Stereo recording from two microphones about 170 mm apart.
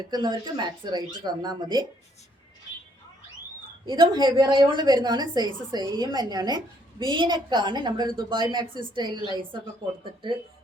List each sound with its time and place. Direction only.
0.0 s a woman's voice: 25° right (ahead or behind)
3.8 s a woman's voice: 30° right (ahead or behind)